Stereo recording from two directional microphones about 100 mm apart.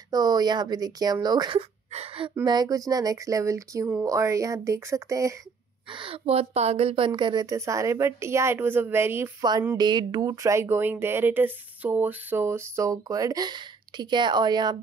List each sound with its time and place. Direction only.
0.1 s speech: 40° right (ahead or behind)
1.9 s speech: 80° right
2.4 s speech: 40° right (ahead or behind)
5.9 s a woman's voice: 60° right (ahead or behind); by 7.1 s 75° right (ahead or behind)
7.2 s speech: 50° right (ahead or behind)
7.4 s a woman's voice: 30° right (ahead or behind)
9.4 s speech: 45° right (ahead or behind)